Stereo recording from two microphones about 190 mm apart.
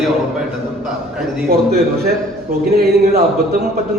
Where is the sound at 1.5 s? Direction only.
55° right (ahead or behind).